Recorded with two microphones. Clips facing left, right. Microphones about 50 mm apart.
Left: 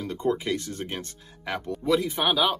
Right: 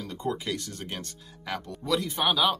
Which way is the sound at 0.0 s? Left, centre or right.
Left.